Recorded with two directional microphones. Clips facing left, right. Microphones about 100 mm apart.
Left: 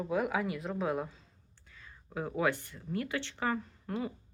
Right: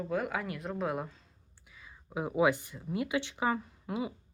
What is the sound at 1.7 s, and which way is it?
A woman's voice, 15° right (ahead or behind).